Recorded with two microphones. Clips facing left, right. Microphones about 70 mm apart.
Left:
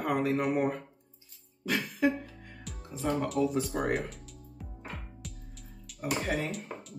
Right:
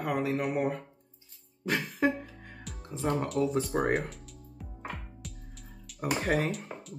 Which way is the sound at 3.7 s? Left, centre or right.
Right.